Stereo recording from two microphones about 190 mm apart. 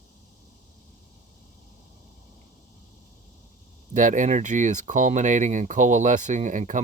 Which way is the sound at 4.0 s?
40° right (ahead or behind).